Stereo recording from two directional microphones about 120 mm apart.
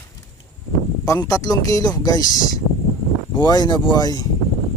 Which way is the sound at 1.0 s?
25° left (ahead or behind).